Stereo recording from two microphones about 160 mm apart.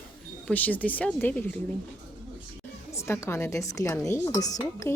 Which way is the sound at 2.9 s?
15° left (ahead or behind).